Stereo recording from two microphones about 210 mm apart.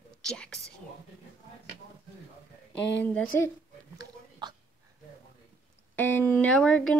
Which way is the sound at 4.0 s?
20° right (ahead or behind).